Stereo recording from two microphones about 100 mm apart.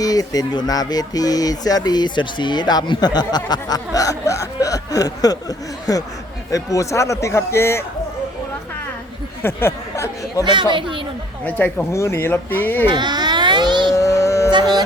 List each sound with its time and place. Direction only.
0.0 s a man's voice: 40° left (ahead or behind)
9.4 s speech: 25° left (ahead or behind)
10.4 s speech: 50° right (ahead or behind)
11.4 s speech: 15° left (ahead or behind)
11.9 s a man's voice: 30° left (ahead or behind)
12.9 s baby cry: 45° right (ahead or behind)
13.9 s a sound: 30° left (ahead or behind)